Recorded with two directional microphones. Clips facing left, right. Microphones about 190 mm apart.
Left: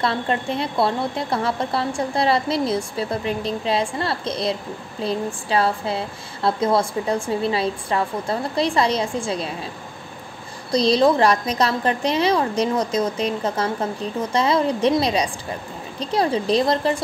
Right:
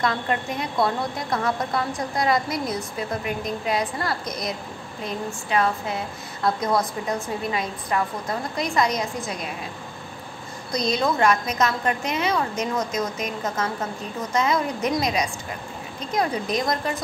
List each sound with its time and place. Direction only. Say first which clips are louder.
0.0 s a woman's voice: left 2 dB; 30° left (ahead or behind)
10.7 s a woman's voice: left 7 dB; 30° left (ahead or behind)